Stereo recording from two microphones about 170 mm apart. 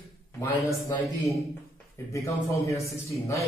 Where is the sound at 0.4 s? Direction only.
20° left (ahead or behind).